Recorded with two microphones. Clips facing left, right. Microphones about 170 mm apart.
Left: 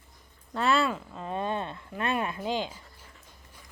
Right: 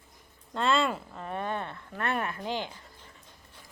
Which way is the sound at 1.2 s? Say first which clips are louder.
Left 3 dB; 20° left (ahead or behind).